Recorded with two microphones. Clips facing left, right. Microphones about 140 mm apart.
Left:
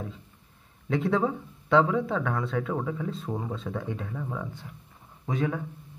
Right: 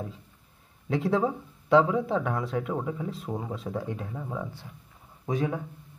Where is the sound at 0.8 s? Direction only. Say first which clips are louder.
Even; 20° right (ahead or behind).